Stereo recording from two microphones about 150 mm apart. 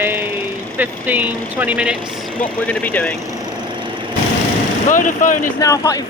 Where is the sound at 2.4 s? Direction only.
10° left (ahead or behind).